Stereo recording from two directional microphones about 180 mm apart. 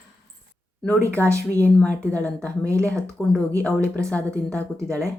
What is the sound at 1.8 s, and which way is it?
Speech, 5° left (ahead or behind).